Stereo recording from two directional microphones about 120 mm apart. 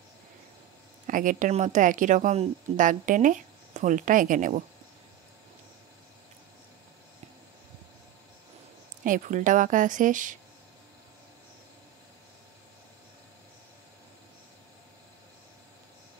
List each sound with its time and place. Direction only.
1.0 s speech: 90° right
9.1 s speech: 90° right